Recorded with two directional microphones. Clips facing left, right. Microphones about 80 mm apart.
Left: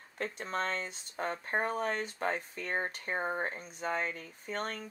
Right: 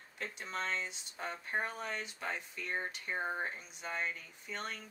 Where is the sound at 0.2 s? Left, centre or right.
Left.